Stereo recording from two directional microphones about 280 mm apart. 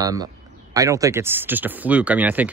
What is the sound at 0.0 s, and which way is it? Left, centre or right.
Speech, centre.